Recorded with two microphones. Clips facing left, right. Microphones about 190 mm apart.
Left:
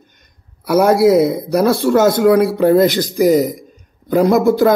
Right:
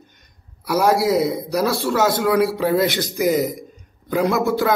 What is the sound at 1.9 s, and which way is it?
Speech, 45° left (ahead or behind).